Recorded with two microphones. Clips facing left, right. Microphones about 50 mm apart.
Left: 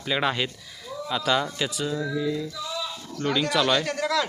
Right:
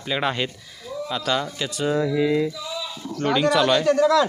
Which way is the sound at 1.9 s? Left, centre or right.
Right.